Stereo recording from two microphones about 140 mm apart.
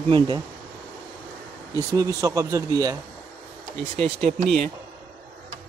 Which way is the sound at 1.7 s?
20° right (ahead or behind).